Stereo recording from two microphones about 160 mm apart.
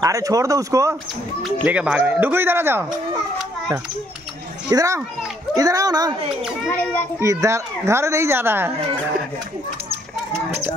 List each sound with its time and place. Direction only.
0.0 s speech: 20° right (ahead or behind)
1.7 s a child's voice: 10° right (ahead or behind)
4.6 s speech: 20° right (ahead or behind)
6.7 s a child's voice: 10° left (ahead or behind)
7.2 s a child's voice: 20° right (ahead or behind)